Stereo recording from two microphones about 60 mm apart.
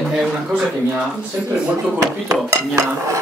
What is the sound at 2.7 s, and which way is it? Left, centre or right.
Dishes, right.